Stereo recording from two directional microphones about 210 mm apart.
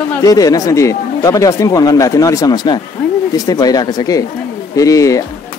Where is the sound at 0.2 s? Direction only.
15° left (ahead or behind).